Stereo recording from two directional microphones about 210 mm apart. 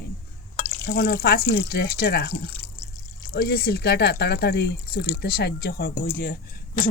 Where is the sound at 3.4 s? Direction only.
50° left (ahead or behind).